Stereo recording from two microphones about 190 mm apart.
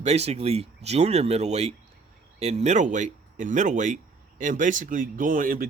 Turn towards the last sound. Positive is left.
turn(degrees=-45)  # may be behind; listen again after turning